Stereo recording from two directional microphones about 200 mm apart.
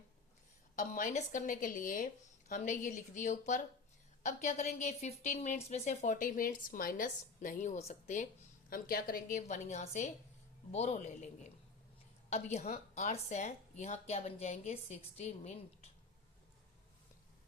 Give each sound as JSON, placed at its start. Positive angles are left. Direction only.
{"t": 0.8, "sound": "a woman's voice", "side_deg": 40}
{"t": 8.7, "sound": "a woman's voice", "side_deg": 50}
{"t": 12.3, "sound": "a woman's voice", "side_deg": 35}